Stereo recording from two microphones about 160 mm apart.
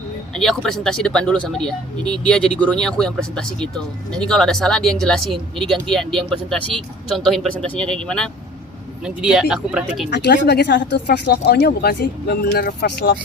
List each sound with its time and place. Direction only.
0.3 s speech: 5° left (ahead or behind)
10.1 s speech: 90° left